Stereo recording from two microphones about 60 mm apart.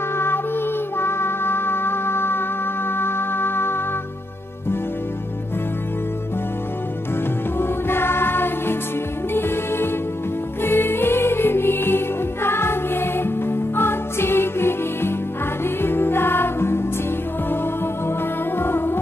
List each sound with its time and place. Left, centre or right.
0.9 s music: left
7.5 s music: left
18.6 s music: left